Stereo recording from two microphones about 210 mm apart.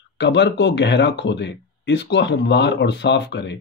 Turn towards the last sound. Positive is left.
turn(degrees=55)  # may be behind; listen again after turning